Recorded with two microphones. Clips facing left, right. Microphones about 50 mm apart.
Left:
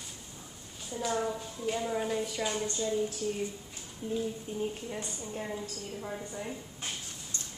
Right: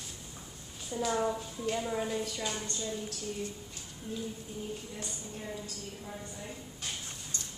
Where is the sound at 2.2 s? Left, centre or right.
Centre.